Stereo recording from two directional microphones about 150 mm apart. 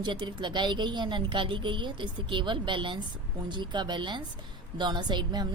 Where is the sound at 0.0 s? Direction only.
30° right (ahead or behind).